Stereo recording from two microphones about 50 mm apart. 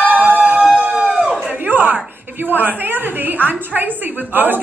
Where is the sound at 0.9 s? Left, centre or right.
Centre.